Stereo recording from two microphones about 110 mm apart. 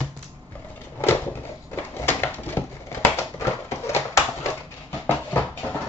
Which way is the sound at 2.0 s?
20° left (ahead or behind).